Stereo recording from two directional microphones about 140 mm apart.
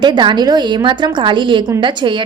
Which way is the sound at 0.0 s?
35° right (ahead or behind).